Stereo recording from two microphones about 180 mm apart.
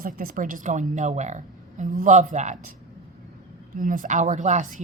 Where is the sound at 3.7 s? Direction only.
50° right (ahead or behind).